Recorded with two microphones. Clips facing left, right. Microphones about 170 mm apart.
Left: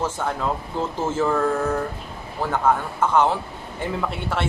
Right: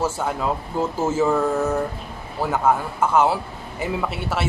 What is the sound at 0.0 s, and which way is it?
A man's voice, 10° right (ahead or behind).